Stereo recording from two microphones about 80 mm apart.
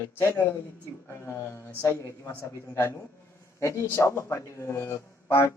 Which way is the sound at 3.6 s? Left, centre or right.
Left.